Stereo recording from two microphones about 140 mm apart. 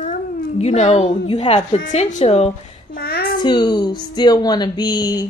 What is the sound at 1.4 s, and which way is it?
Speech, 50° left (ahead or behind).